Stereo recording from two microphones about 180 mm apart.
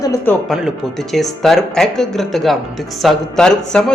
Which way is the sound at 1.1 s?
Centre (ahead or behind).